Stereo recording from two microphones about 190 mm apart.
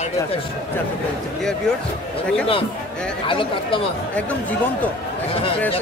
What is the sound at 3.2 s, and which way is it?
Speech, 25° left (ahead or behind).